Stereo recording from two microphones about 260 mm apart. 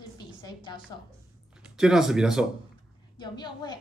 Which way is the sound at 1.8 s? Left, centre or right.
Centre.